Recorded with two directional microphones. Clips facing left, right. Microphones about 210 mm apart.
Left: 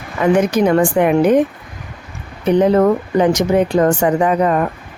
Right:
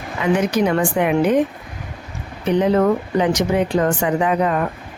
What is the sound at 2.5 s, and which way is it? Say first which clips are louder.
Speech: left 4 dB; 45° left (ahead or behind).